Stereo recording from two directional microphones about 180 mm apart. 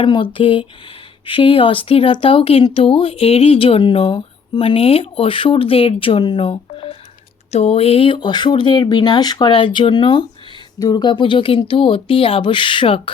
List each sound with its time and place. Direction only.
0.0 s speech: 30° left (ahead or behind)